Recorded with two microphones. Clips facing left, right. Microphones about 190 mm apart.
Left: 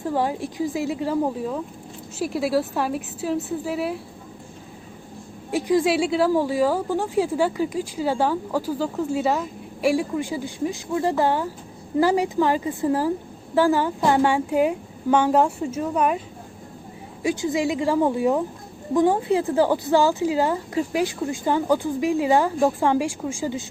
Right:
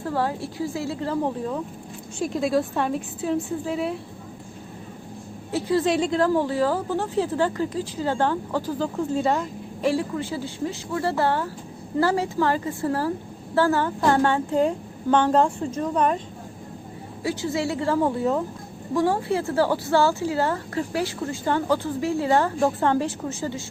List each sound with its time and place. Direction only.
0.0 s a woman's voice: 15° left (ahead or behind)
5.5 s speech: 15° left (ahead or behind)
17.2 s speech: 15° left (ahead or behind)